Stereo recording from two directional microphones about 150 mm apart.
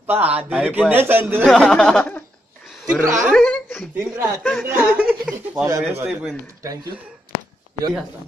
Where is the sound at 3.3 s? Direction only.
5° left (ahead or behind).